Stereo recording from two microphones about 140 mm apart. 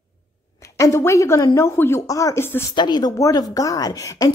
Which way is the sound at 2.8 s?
30° left (ahead or behind).